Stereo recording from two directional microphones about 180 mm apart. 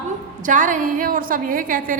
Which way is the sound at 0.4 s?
45° right (ahead or behind).